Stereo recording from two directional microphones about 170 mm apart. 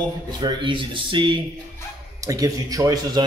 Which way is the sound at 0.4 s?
25° right (ahead or behind).